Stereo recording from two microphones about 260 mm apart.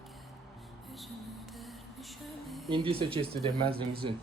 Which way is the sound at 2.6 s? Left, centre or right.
Centre.